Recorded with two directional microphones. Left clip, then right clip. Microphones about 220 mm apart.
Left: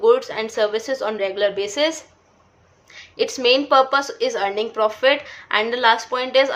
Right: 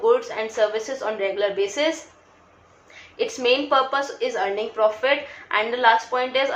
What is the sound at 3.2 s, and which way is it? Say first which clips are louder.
A woman's voice: left 3 dB; 50° left (ahead or behind).